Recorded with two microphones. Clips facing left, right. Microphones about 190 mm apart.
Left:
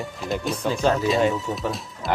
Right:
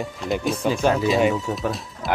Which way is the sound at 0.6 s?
15° right (ahead or behind).